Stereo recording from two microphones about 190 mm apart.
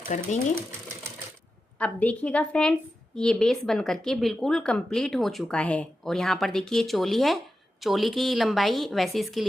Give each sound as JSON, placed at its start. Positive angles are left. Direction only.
{"t": 0.1, "sound": "speech", "side_deg": 40}
{"t": 1.8, "sound": "a woman's voice", "side_deg": 5}